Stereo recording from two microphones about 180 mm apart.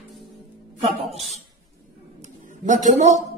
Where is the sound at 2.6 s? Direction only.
45° right (ahead or behind).